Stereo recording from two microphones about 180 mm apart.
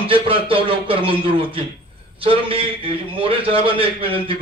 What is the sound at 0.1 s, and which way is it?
A man's voice, 30° right (ahead or behind).